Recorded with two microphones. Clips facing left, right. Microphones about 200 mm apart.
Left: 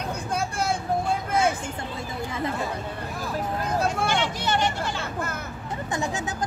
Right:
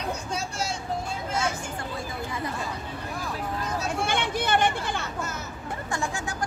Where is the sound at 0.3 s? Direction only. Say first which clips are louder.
Left 5 dB; 55° left (ahead or behind).